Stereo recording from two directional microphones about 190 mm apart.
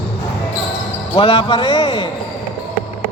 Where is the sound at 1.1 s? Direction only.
25° left (ahead or behind).